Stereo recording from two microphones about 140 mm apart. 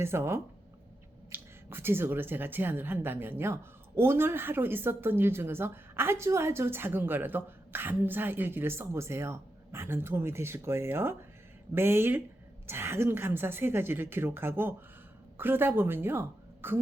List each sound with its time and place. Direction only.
0.0 s speech: 20° right (ahead or behind)